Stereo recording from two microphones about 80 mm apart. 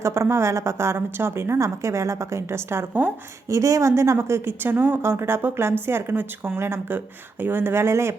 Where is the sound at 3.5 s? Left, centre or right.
Right.